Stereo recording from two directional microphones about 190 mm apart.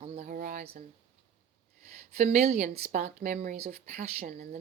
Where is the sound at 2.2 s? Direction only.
35° right (ahead or behind).